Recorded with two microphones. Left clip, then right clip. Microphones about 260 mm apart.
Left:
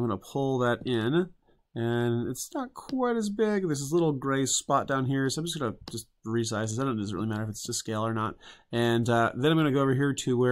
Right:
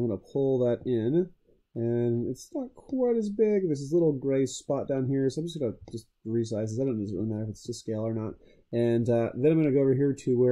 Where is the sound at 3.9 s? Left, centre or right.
Left.